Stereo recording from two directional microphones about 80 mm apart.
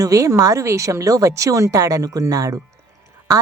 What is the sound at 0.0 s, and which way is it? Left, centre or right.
Speech, right.